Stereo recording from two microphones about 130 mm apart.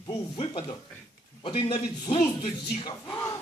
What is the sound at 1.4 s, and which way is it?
A man's voice, 40° left (ahead or behind).